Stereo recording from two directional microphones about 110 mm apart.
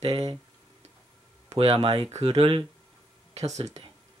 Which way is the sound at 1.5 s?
65° right (ahead or behind).